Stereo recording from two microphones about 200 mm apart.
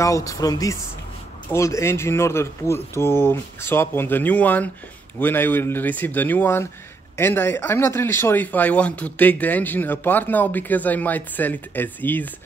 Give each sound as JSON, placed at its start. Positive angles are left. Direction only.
{"t": 0.0, "sound": "speech", "side_deg": 15}